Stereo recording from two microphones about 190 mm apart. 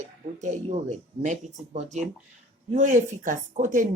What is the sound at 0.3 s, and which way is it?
Speech, 40° right (ahead or behind).